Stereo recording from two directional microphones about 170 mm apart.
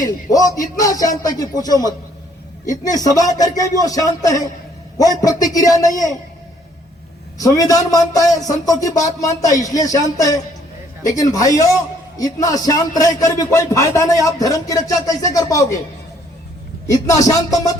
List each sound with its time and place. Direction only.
0.3 s a man's voice: 20° left (ahead or behind)
7.3 s a man's voice: 20° left (ahead or behind)
16.8 s a man's voice: 20° left (ahead or behind)